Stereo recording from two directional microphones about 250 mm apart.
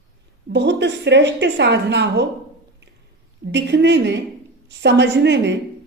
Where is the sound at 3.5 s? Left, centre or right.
Right.